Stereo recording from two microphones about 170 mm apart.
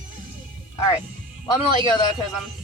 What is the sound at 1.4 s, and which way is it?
Speech, 25° left (ahead or behind).